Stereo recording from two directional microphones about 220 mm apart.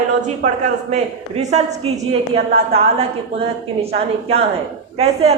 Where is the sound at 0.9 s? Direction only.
30° right (ahead or behind).